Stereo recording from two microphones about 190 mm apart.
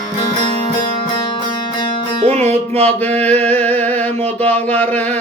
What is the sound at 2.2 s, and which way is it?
Music, 35° right (ahead or behind).